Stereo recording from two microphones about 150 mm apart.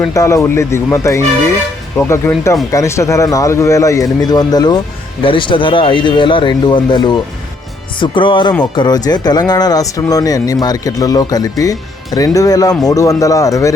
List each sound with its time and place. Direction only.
0.1 s speech: 20° left (ahead or behind)